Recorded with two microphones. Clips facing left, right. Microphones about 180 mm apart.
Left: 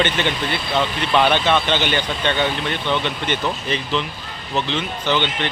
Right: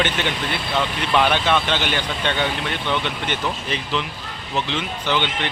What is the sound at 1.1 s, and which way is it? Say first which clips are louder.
Speech: left 2 dB; 5° right (ahead or behind).